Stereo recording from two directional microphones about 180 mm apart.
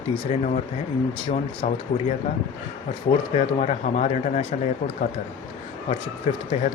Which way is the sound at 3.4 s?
40° left (ahead or behind).